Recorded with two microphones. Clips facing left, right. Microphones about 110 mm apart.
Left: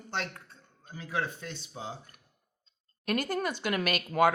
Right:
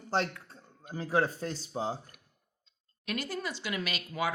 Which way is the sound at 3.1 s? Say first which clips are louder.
Left 5 dB; 50° left (ahead or behind).